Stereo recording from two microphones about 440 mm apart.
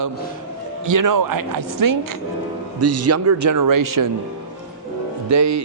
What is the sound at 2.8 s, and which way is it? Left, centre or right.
A man's voice, right.